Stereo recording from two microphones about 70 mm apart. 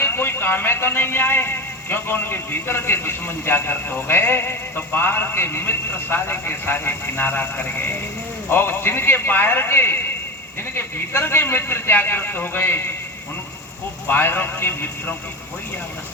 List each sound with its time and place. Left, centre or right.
0.0 s speech: left
14.1 s speech: left